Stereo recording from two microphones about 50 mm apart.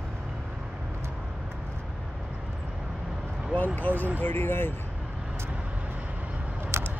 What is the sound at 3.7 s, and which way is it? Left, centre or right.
Vehicle, left.